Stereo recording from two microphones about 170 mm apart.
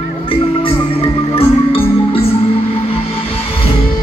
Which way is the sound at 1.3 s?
35° left (ahead or behind).